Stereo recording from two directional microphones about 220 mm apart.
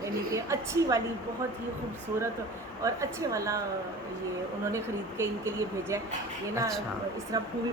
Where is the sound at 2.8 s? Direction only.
15° right (ahead or behind).